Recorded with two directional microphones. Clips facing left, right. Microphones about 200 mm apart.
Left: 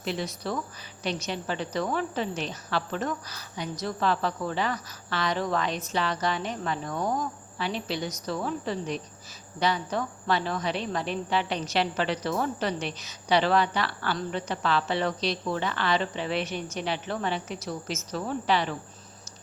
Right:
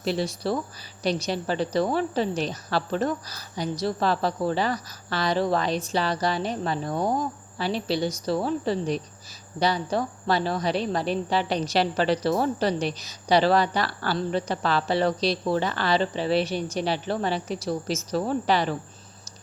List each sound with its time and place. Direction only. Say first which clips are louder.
0.0 s a woman's voice: right 5 dB; 35° right (ahead or behind)